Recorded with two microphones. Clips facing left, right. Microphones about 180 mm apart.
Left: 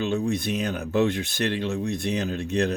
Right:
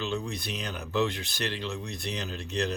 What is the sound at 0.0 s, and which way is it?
Speech, 50° left (ahead or behind).